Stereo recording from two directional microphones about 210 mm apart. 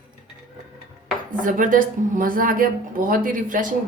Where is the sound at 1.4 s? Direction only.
40° right (ahead or behind).